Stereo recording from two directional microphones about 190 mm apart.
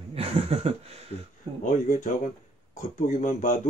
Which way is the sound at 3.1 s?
40° left (ahead or behind).